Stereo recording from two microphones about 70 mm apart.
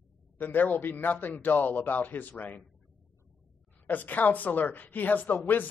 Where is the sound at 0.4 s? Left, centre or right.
Left.